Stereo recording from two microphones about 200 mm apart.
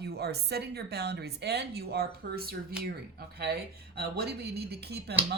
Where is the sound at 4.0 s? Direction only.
50° right (ahead or behind).